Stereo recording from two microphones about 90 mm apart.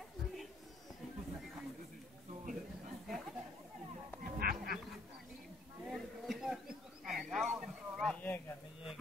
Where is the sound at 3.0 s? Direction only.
Centre (ahead or behind).